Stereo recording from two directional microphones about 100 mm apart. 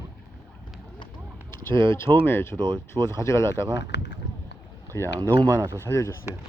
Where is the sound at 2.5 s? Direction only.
55° right (ahead or behind).